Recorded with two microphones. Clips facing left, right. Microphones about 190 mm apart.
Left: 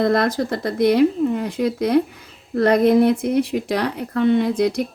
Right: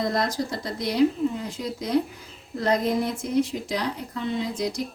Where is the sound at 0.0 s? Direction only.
60° left (ahead or behind).